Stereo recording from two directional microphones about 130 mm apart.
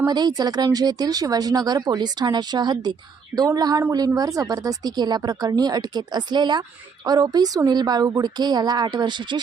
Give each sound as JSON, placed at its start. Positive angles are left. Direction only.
{"t": 0.0, "sound": "speech", "side_deg": -30}
{"t": 3.3, "sound": "a sound", "side_deg": -30}
{"t": 3.9, "sound": "speech", "side_deg": -30}